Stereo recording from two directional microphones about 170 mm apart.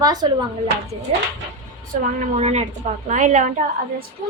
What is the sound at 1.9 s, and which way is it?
A woman's voice, 45° right (ahead or behind).